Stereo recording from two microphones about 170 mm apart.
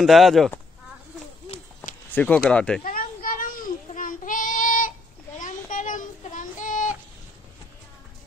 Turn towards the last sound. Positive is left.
turn(degrees=50)  # may be behind; listen again after turning